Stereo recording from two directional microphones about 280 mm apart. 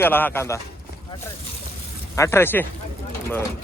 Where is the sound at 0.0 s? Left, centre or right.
Centre.